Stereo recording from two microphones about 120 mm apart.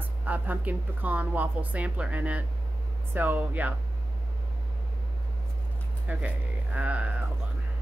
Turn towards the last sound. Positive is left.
turn(degrees=-10)  # may be behind; listen again after turning